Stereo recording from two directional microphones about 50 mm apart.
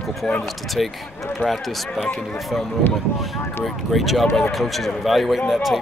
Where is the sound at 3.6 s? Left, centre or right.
Centre.